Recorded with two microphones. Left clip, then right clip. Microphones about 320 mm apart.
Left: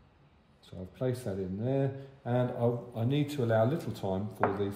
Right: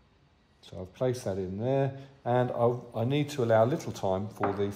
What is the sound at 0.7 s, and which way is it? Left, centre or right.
Speech, centre.